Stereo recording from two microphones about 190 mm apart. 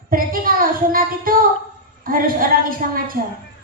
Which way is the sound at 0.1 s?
45° right (ahead or behind).